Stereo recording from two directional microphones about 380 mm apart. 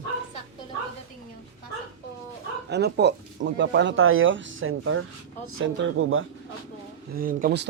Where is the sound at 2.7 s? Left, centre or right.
Right.